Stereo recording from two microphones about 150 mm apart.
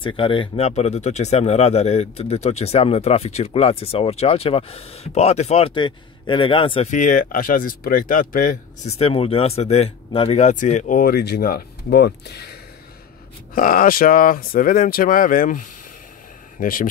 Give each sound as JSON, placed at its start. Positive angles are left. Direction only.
{"t": 0.0, "sound": "speech", "side_deg": 35}
{"t": 6.9, "sound": "speech", "side_deg": 60}
{"t": 8.9, "sound": "speech", "side_deg": 40}
{"t": 13.6, "sound": "speech", "side_deg": 65}